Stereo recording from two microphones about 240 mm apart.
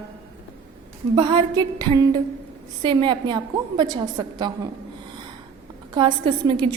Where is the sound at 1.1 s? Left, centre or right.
Centre.